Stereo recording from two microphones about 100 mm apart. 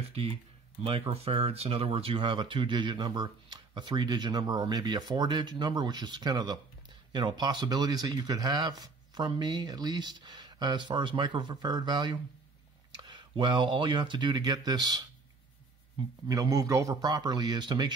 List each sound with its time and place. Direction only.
0.1 s speech: 75° right (ahead or behind); by 15.0 s 45° right (ahead or behind)
16.3 s speech: 35° right (ahead or behind)